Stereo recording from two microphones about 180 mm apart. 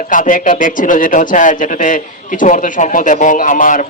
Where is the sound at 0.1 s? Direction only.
45° left (ahead or behind).